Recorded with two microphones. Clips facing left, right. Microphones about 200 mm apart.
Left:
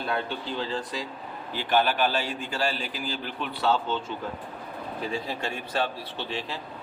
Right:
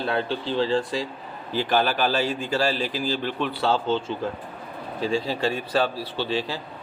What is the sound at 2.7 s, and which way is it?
Speech, 35° right (ahead or behind).